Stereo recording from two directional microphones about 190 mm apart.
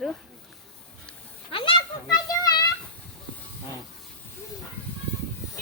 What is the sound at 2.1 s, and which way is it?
Children playing, 20° left (ahead or behind).